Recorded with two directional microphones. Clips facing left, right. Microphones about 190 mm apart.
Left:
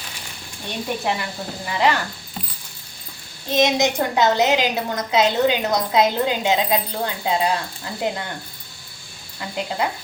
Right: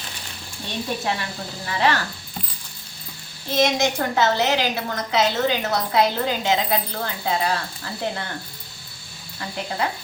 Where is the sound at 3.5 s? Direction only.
15° left (ahead or behind).